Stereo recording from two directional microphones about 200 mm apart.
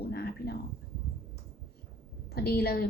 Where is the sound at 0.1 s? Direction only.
50° left (ahead or behind).